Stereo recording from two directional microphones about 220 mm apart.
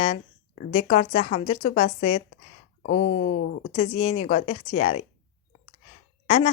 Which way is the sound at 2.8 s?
60° left (ahead or behind).